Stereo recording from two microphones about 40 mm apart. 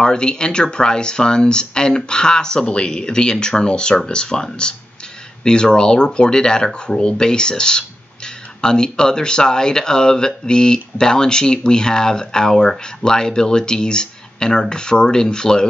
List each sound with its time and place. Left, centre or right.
0.0 s speech: left